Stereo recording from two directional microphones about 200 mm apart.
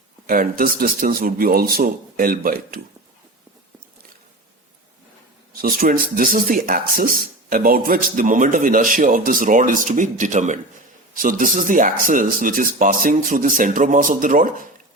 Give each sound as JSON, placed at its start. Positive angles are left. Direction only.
{"t": 0.3, "sound": "speech", "side_deg": -45}
{"t": 5.5, "sound": "speech", "side_deg": -45}